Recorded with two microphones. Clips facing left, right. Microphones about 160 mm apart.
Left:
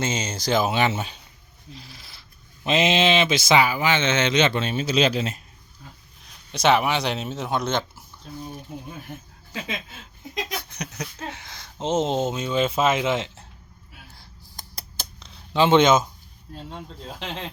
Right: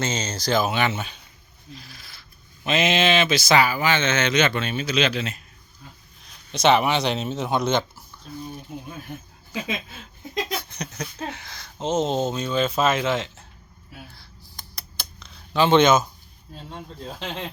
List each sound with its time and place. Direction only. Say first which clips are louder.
0.0 s speech: even; 10° left (ahead or behind)
0.3 s speech: left 1 dB; 25° left (ahead or behind)
1.7 s owl: right 1 dB; 25° left (ahead or behind)
2.6 s speech: left 1 dB; 25° left (ahead or behind)
6.5 s speech: right 1 dB; 5° left (ahead or behind)
10.3 s a sound: right 3 dB; 15° left (ahead or behind)
11.3 s speech: right 1 dB; 20° left (ahead or behind)
14.2 s a sound: left 1 dB; 45° left (ahead or behind)
15.3 s speech: even; 20° left (ahead or behind)
17.2 s speech: right 1 dB; centre (ahead or behind)